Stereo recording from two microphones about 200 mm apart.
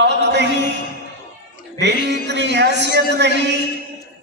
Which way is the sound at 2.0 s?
60° right (ahead or behind).